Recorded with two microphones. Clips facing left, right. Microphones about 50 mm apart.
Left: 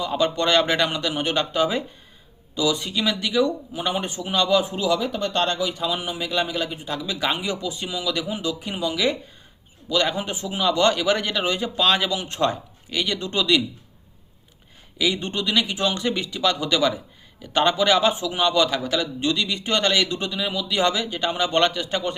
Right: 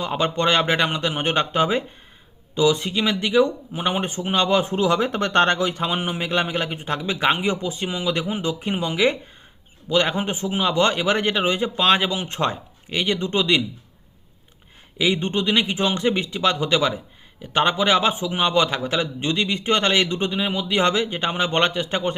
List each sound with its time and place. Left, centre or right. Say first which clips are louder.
0.0 s a man's voice: right 1 dB; right
14.9 s a man's voice: right 3 dB; right